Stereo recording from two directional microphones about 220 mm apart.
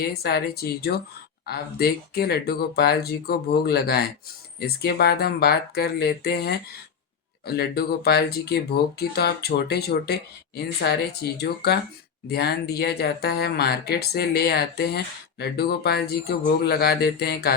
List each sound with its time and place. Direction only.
0.1 s speech: 45° left (ahead or behind)